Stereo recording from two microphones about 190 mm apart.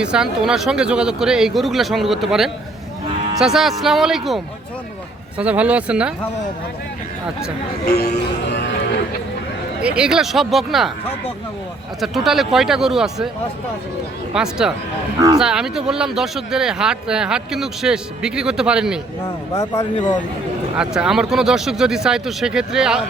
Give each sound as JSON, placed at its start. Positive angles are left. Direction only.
{"t": 0.0, "sound": "speech", "side_deg": -5}
{"t": 5.4, "sound": "speech", "side_deg": -5}
{"t": 7.9, "sound": "music", "side_deg": 55}
{"t": 9.8, "sound": "speech", "side_deg": -5}
{"t": 11.9, "sound": "speech", "side_deg": 0}
{"t": 14.3, "sound": "speech", "side_deg": -5}
{"t": 20.7, "sound": "speech", "side_deg": -5}